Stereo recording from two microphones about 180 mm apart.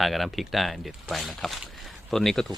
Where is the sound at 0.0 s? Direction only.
Centre (ahead or behind).